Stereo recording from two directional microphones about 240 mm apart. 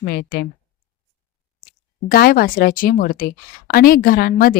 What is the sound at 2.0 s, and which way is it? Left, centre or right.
A woman's voice, left.